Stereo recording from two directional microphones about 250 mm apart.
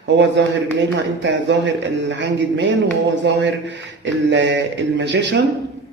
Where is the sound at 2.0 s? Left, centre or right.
Right.